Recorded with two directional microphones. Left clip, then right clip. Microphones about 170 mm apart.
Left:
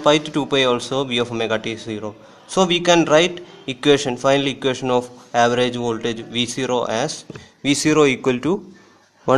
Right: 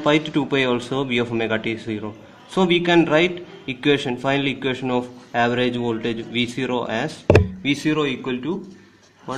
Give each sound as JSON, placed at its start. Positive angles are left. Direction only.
{"t": 0.0, "sound": "speech", "side_deg": 10}
{"t": 7.6, "sound": "speech", "side_deg": 35}